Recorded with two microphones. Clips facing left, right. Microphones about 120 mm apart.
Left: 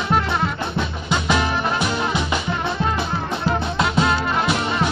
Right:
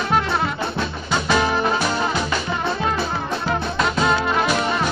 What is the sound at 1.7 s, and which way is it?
Music, 15° left (ahead or behind).